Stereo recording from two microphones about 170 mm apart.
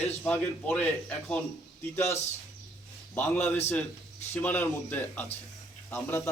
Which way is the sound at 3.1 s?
15° left (ahead or behind).